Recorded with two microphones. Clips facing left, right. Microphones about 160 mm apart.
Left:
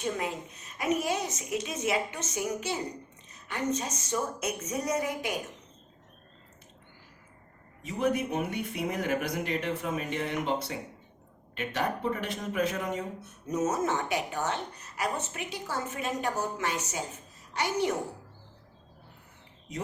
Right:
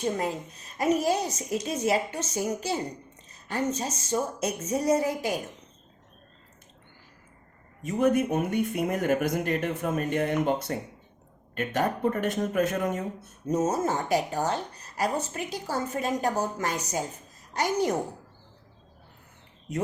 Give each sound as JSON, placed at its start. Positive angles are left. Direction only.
{"t": 0.0, "sound": "speech", "side_deg": -35}
{"t": 7.8, "sound": "speech", "side_deg": -45}
{"t": 13.5, "sound": "a woman's voice", "side_deg": -30}